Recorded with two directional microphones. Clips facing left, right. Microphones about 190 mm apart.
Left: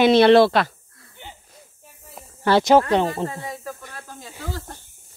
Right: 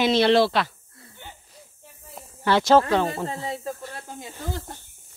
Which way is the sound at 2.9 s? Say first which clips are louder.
Left 3 dB; 20° left (ahead or behind).